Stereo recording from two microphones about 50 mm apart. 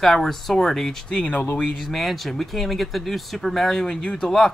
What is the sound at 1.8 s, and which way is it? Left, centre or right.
Speech, centre.